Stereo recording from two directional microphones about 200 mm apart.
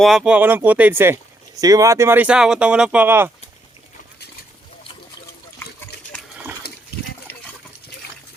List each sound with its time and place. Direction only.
0.0 s speech: centre (ahead or behind)
5.9 s water: 55° left (ahead or behind)